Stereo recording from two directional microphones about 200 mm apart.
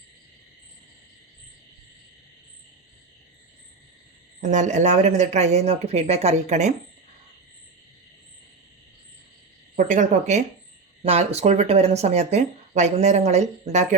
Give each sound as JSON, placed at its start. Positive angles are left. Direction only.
{"t": 4.4, "sound": "speech", "side_deg": -35}
{"t": 9.7, "sound": "speech", "side_deg": -40}